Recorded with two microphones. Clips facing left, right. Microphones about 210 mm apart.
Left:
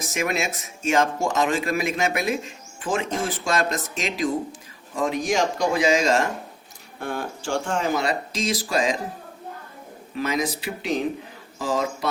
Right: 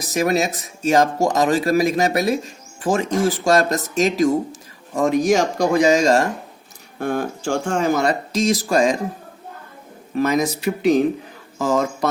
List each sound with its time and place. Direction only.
0.0 s speech: 40° right (ahead or behind)
10.2 s speech: 45° right (ahead or behind)